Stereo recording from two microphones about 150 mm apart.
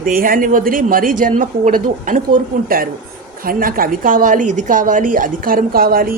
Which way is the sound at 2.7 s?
75° right (ahead or behind).